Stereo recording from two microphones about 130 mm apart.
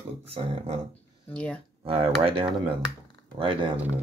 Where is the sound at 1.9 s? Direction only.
45° right (ahead or behind).